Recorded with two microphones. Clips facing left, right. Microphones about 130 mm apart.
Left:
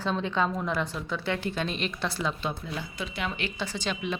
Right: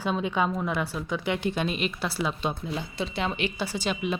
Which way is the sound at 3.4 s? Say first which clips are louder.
Right 3 dB; 10° right (ahead or behind).